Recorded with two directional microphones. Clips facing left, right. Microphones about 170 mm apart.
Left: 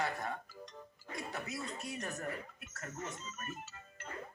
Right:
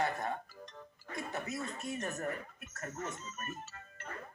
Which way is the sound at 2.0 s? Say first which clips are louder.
Right 3 dB; 45° right (ahead or behind).